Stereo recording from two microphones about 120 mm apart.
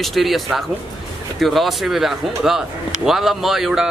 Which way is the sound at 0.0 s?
Centre (ahead or behind).